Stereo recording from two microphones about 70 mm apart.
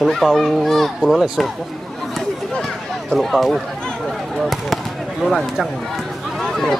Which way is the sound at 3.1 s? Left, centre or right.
Centre.